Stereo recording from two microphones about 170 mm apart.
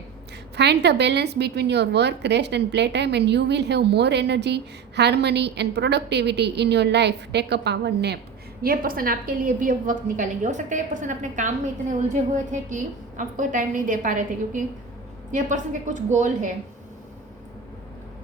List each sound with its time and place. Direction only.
0.5 s a woman's voice: 80° right
8.6 s a woman's voice: 55° right (ahead or behind)